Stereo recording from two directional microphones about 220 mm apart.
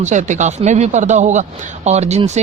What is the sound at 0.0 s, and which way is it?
A man's voice, 35° right (ahead or behind).